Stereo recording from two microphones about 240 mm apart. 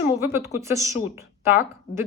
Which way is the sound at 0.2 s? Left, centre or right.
Centre.